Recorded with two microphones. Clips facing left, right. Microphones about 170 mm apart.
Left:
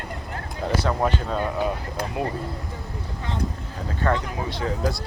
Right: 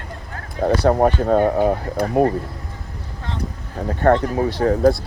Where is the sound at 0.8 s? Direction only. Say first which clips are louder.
Right 10 dB; 55° right (ahead or behind).